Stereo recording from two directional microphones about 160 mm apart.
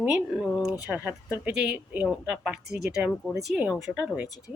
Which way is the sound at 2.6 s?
90° right.